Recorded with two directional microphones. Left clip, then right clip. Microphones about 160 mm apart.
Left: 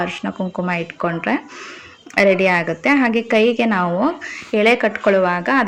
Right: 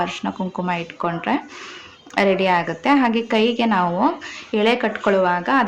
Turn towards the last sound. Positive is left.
turn(degrees=20)  # may be behind; listen again after turning